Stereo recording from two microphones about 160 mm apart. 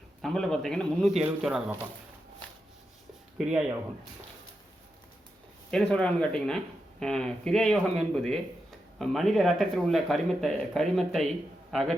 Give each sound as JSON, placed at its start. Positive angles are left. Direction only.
{"t": 0.2, "sound": "speech", "side_deg": 0}
{"t": 3.3, "sound": "speech", "side_deg": -5}
{"t": 5.7, "sound": "a man's voice", "side_deg": 5}